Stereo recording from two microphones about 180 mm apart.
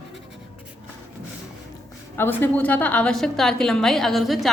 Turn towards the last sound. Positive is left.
turn(degrees=0)  # may be behind; listen again after turning